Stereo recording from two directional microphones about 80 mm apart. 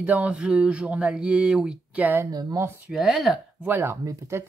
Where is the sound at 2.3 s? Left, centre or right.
Right.